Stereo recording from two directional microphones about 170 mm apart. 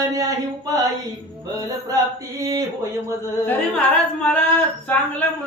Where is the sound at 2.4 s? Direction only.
20° right (ahead or behind).